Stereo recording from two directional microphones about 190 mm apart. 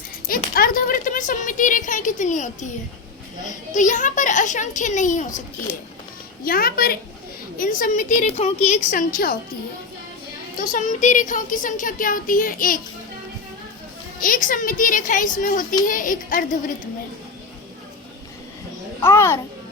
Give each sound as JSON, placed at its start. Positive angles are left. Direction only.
{"t": 0.3, "sound": "speech", "side_deg": 50}
{"t": 6.4, "sound": "a child's voice", "side_deg": 50}
{"t": 10.6, "sound": "a child's voice", "side_deg": 45}
{"t": 14.2, "sound": "a child's voice", "side_deg": 45}
{"t": 18.9, "sound": "a child's voice", "side_deg": 15}